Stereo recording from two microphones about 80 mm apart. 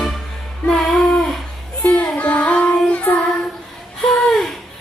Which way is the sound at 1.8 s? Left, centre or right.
Centre.